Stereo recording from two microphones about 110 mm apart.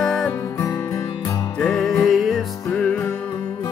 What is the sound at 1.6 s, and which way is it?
Music, 5° left (ahead or behind).